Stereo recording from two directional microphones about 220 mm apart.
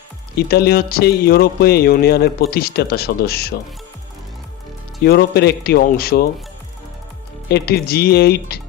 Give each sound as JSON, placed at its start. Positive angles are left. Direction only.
{"t": 0.3, "sound": "speech", "side_deg": 45}
{"t": 5.0, "sound": "speech", "side_deg": 45}
{"t": 7.4, "sound": "speech", "side_deg": 45}